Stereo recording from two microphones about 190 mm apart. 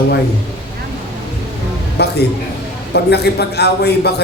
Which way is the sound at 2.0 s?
60° left (ahead or behind).